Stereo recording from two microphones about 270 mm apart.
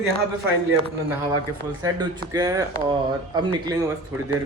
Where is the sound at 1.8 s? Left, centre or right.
Centre.